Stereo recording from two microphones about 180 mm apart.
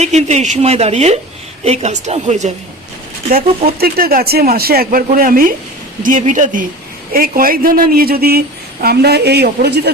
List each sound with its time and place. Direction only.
0.0 s speech: 40° right (ahead or behind)
3.3 s speech: 55° right (ahead or behind)